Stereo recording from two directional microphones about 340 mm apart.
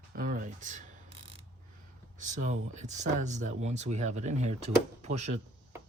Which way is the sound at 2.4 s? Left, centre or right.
Right.